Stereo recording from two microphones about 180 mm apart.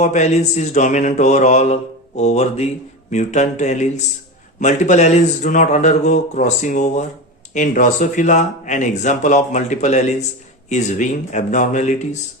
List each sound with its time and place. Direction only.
0.0 s mantra: 40° left (ahead or behind)
7.5 s speech: 45° left (ahead or behind)
10.7 s mantra: 40° left (ahead or behind)